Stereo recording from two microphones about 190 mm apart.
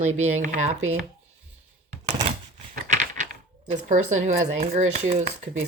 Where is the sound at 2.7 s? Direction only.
45° right (ahead or behind).